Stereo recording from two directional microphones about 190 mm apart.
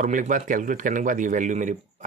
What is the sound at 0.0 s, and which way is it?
A man's voice, 40° right (ahead or behind).